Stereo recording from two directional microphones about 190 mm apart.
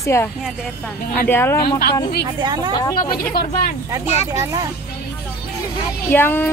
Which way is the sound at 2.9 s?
50° left (ahead or behind).